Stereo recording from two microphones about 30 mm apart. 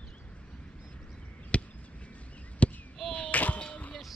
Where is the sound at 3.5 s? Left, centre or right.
Left.